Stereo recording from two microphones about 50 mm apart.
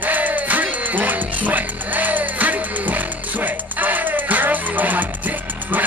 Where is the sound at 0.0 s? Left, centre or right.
Right.